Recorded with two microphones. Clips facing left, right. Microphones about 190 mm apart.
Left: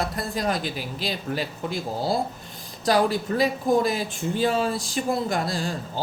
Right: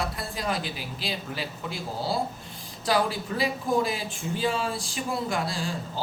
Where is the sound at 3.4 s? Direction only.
40° left (ahead or behind).